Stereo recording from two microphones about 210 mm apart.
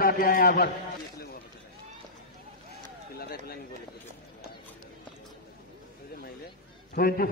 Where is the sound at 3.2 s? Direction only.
45° left (ahead or behind).